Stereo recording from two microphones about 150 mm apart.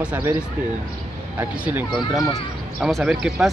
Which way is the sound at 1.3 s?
15° right (ahead or behind).